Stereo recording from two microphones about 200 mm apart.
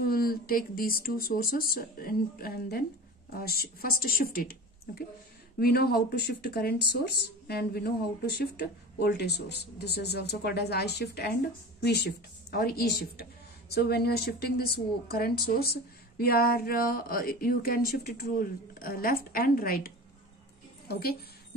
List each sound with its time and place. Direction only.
0.0 s speech: 50° left (ahead or behind)